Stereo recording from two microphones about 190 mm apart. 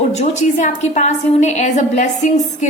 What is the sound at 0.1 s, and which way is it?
A woman's voice, 35° left (ahead or behind).